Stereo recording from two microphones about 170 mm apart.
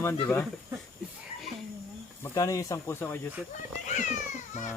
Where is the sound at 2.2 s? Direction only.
20° left (ahead or behind).